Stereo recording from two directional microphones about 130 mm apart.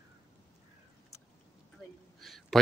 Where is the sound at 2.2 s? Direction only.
Centre (ahead or behind).